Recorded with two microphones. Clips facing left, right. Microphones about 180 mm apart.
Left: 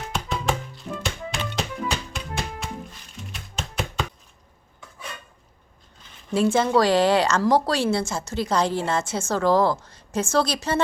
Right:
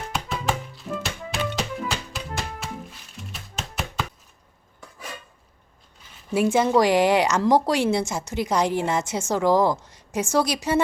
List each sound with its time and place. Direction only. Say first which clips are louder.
0.1 s music: left 1 dB; 5° right (ahead or behind)
6.3 s speech: even; 15° right (ahead or behind)